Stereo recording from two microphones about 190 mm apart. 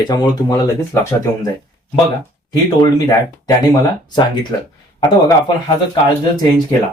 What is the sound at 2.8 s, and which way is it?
Speech, 20° left (ahead or behind).